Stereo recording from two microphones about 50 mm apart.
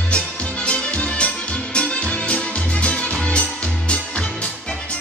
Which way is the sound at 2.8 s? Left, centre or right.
Left.